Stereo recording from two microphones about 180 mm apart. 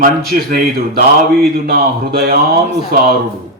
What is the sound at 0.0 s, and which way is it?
Speech, 55° right (ahead or behind).